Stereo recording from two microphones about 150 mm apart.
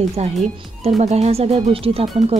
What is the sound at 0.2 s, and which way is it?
Speech, 45° right (ahead or behind).